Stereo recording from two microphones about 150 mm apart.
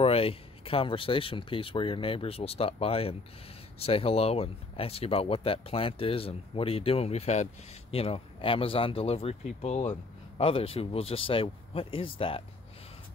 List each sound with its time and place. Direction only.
0.0 s speech: 40° left (ahead or behind)